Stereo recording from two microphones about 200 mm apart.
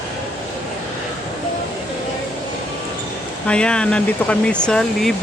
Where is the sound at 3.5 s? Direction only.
5° left (ahead or behind).